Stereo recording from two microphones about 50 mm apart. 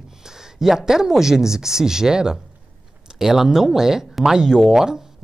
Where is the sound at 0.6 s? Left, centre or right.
Centre.